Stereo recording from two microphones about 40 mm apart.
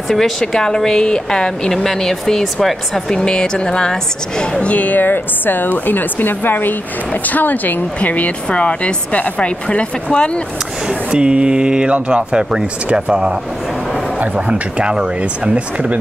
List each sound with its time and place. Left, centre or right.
0.1 s speech: centre
3.1 s speech: centre; by 4.9 s left
4.9 s a woman's voice: left
8.0 s speech: left
10.9 s speech: right